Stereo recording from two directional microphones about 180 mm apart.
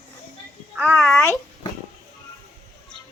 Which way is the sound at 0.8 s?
5° right (ahead or behind).